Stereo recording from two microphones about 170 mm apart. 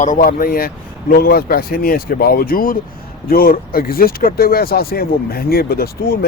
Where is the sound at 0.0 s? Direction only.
55° left (ahead or behind).